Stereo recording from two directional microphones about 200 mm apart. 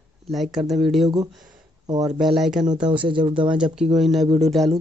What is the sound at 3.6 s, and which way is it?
Speech, 5° right (ahead or behind).